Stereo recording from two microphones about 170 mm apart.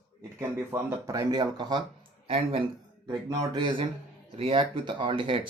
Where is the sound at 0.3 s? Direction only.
15° right (ahead or behind).